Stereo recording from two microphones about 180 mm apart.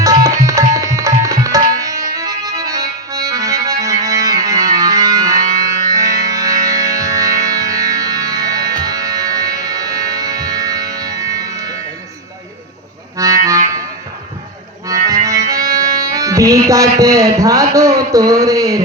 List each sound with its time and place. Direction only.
0.0 s tabla: 20° right (ahead or behind)
5.9 s music: 20° right (ahead or behind)
13.1 s music: 20° right (ahead or behind)
14.8 s music: 20° right (ahead or behind)